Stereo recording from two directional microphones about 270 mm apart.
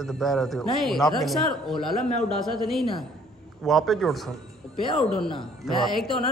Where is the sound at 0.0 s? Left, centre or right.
Centre.